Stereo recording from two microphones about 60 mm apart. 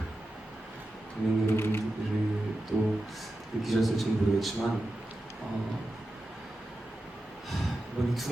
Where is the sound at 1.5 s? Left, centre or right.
Left.